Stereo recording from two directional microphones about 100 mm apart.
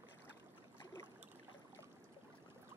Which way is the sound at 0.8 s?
35° left (ahead or behind).